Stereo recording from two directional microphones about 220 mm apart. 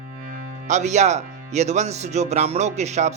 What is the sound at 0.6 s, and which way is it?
Speech, 30° right (ahead or behind).